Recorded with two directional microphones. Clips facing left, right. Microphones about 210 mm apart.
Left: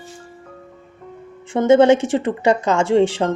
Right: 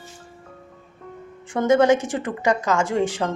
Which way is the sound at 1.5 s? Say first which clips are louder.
Left 5 dB; 25° left (ahead or behind).